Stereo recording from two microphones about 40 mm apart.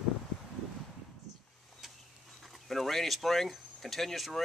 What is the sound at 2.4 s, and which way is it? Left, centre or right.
Speech, centre.